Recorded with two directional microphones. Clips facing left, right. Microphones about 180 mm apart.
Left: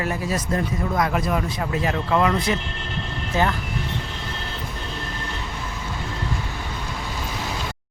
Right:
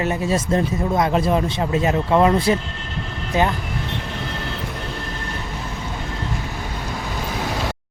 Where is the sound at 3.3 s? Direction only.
20° right (ahead or behind).